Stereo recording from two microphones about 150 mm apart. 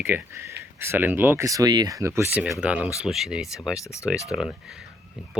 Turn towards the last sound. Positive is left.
turn(degrees=-5)  # may be behind; listen again after turning